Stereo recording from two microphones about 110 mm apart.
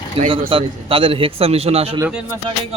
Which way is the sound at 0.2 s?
55° right (ahead or behind).